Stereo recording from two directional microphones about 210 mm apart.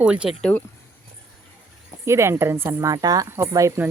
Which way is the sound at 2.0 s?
15° right (ahead or behind).